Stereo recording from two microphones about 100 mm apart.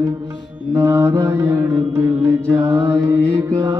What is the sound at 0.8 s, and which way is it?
Mantra, 30° right (ahead or behind).